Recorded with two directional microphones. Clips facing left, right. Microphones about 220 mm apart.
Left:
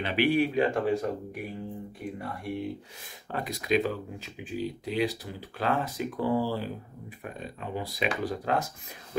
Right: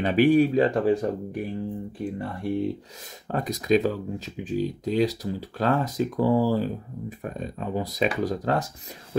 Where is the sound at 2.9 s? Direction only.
40° right (ahead or behind).